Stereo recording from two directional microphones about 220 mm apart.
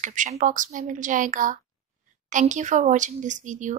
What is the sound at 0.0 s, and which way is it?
A woman's voice, 35° right (ahead or behind).